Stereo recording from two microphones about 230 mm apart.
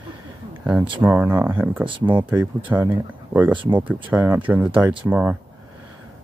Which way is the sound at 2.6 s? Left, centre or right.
Centre.